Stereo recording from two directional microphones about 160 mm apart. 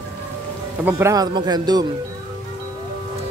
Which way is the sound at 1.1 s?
25° right (ahead or behind).